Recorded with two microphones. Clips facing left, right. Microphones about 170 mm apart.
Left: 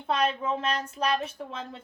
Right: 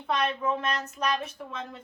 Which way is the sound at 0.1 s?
30° left (ahead or behind).